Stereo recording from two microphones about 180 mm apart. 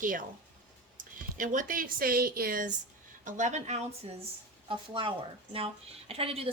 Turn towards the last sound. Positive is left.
turn(degrees=-35)  # may be behind; listen again after turning